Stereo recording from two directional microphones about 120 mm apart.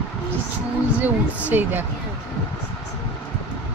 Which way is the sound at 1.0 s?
15° right (ahead or behind).